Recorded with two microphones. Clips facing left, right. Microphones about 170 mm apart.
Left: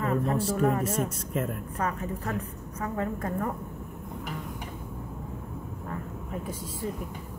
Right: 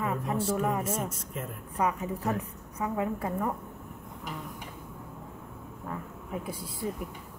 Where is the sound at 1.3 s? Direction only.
70° left (ahead or behind).